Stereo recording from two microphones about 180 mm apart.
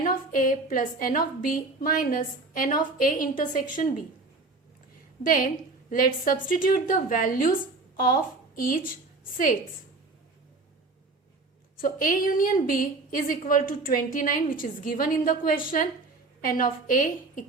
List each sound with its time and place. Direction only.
0.0 s a woman's voice: 50° left (ahead or behind)
5.2 s a woman's voice: 50° left (ahead or behind)
11.8 s a woman's voice: 50° left (ahead or behind)